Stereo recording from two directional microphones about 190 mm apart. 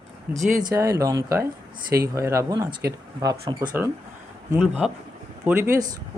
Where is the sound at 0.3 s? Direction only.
40° right (ahead or behind).